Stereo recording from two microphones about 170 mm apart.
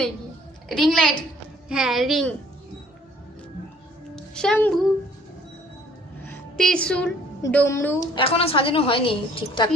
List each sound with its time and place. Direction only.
0.7 s a woman's voice: centre (ahead or behind)
4.1 s speech: 5° left (ahead or behind)
6.6 s a woman's voice: 5° left (ahead or behind); by 8.2 s 20° left (ahead or behind)
8.2 s a woman's voice: 35° left (ahead or behind)